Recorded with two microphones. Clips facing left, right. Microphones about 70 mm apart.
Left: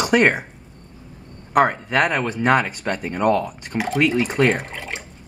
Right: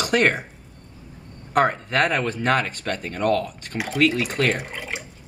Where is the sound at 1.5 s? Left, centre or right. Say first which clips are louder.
Left 2 dB; centre.